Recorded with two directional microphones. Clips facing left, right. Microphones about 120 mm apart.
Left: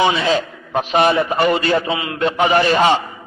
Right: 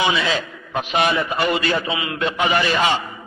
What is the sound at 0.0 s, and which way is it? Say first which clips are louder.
A man's voice: left 4 dB; 35° left (ahead or behind).